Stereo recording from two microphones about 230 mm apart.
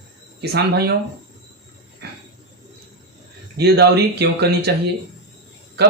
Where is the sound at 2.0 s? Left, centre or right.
Right.